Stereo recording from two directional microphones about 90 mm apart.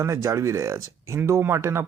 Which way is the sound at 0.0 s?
35° right (ahead or behind).